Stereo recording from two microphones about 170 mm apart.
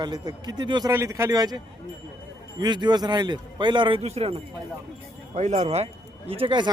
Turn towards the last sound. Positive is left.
turn(degrees=-30)  # may be behind; listen again after turning